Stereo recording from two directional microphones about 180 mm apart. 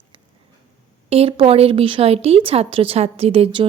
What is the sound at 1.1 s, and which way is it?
Speech, 35° right (ahead or behind).